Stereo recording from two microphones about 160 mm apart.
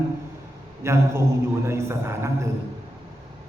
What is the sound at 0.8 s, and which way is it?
A man's voice, 15° right (ahead or behind).